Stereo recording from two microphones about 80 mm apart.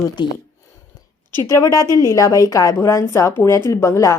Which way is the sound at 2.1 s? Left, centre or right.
Left.